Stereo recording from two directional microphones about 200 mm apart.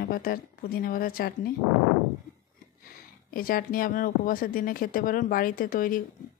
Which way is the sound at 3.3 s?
45° left (ahead or behind).